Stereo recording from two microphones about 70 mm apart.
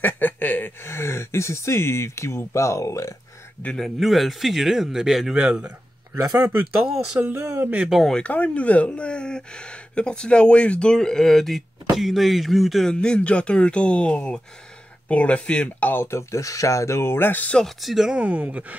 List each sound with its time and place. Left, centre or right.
0.0 s speech: left
3.7 s a man's voice: centre
6.3 s speech: right
7.1 s speech: right
7.4 s speech: right
7.9 s a man's voice: centre
8.2 s speech: left; by 12.9 s centre
13.0 s speech: centre
15.9 s speech: left
17.6 s a man's voice: centre
18.1 s speech: right